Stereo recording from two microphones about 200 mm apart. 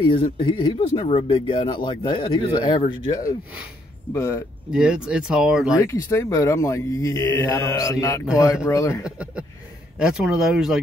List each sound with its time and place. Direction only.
0.0 s speech: 25° left (ahead or behind)
4.1 s speech: 15° left (ahead or behind)
4.7 s speech: 5° right (ahead or behind)
5.8 s speech: 15° left (ahead or behind)
9.0 s a man's voice: 5° right (ahead or behind)